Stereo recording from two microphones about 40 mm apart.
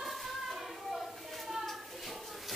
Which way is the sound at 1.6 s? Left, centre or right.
Centre.